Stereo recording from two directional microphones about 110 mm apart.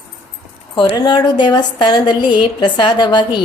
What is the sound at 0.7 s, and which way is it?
A woman's voice, 45° left (ahead or behind).